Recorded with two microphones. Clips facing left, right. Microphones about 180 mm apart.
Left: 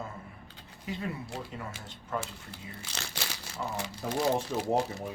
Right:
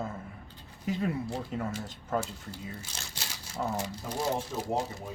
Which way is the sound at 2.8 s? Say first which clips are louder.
Left 3 dB; 70° left (ahead or behind).